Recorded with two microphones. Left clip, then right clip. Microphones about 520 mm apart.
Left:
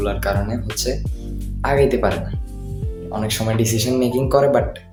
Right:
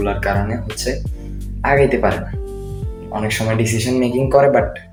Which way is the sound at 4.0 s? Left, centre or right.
Left.